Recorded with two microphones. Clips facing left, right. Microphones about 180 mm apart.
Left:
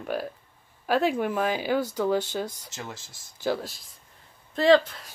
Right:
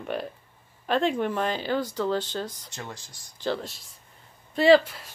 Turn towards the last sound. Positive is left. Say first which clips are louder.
# right 1 dB
turn(degrees=-5)  # may be behind; listen again after turning